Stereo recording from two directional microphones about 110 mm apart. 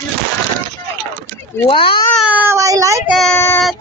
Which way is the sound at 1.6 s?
50° left (ahead or behind).